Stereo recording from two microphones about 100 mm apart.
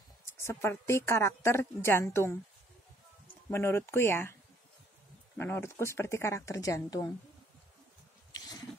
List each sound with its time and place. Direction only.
0.2 s a woman's voice: 25° left (ahead or behind)
3.4 s a woman's voice: 25° left (ahead or behind)
5.4 s a woman's voice: 25° left (ahead or behind)